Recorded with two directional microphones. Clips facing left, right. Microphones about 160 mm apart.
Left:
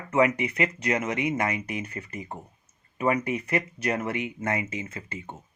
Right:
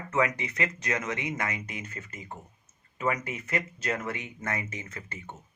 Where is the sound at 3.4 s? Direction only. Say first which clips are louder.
Left 5 dB; 30° left (ahead or behind).